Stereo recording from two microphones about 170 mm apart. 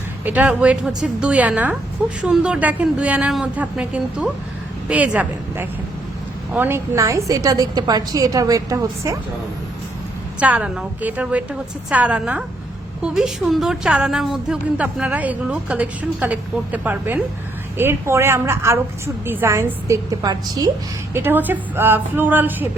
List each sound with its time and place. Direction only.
0.3 s a woman's voice: 10° right (ahead or behind)
10.4 s a woman's voice: 5° right (ahead or behind)